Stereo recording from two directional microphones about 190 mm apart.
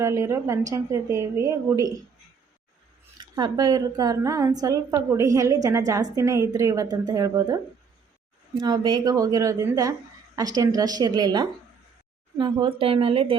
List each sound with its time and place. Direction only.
0.0 s a woman's voice: 15° right (ahead or behind)
3.3 s a woman's voice: 20° right (ahead or behind)